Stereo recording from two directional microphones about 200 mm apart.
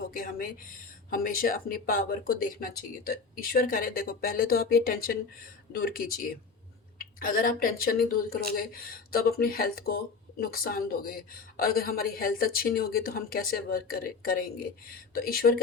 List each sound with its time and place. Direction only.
0.1 s speech: 45° left (ahead or behind)